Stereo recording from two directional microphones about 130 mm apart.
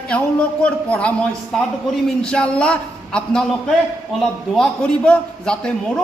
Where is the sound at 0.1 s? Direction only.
10° left (ahead or behind).